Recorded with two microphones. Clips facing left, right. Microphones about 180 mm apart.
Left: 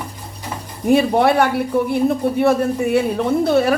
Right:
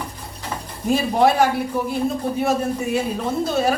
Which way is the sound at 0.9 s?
60° left (ahead or behind).